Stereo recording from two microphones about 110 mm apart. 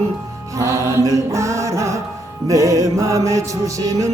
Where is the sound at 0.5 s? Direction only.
30° right (ahead or behind).